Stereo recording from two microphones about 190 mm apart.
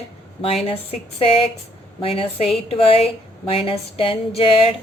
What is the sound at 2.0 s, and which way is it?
A woman's voice, 30° left (ahead or behind).